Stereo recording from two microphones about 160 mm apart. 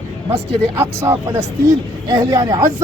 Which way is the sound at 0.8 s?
15° right (ahead or behind).